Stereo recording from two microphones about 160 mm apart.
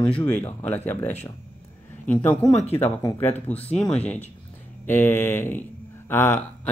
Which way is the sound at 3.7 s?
5° left (ahead or behind).